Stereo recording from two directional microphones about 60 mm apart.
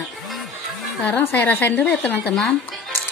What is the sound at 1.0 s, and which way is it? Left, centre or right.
A woman's voice, left.